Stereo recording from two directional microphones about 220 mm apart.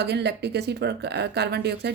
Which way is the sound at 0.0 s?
50° right (ahead or behind).